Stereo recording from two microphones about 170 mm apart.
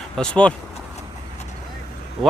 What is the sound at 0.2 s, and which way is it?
Speech, 5° left (ahead or behind).